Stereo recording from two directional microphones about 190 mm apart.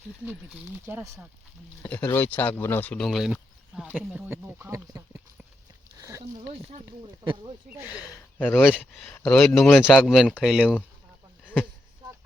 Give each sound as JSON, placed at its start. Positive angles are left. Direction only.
{"t": 0.3, "sound": "speech", "side_deg": -10}
{"t": 1.8, "sound": "speech", "side_deg": 5}
{"t": 7.7, "sound": "speech", "side_deg": -5}
{"t": 8.1, "sound": "speech", "side_deg": 10}